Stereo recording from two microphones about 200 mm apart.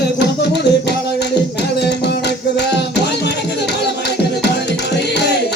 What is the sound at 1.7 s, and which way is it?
Music, 55° left (ahead or behind).